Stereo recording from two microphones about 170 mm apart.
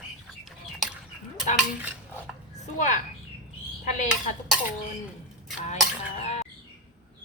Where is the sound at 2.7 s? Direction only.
45° left (ahead or behind).